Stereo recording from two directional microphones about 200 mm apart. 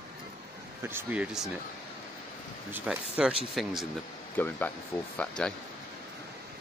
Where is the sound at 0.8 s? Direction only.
10° right (ahead or behind).